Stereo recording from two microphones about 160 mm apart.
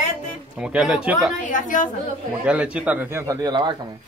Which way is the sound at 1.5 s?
55° left (ahead or behind).